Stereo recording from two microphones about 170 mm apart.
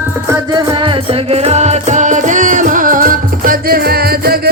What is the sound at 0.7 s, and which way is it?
Music, 30° right (ahead or behind).